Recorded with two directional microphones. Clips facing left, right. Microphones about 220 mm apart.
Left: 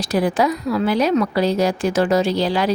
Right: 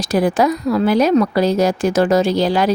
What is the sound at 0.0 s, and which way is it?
A woman's voice, 45° right (ahead or behind).